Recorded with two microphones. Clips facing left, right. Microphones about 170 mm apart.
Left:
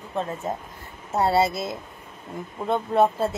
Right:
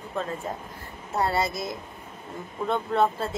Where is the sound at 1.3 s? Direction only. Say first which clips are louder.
Left 5 dB; 25° left (ahead or behind).